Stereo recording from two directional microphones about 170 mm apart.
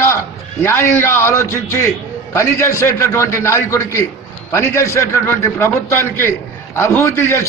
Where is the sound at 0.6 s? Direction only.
15° left (ahead or behind).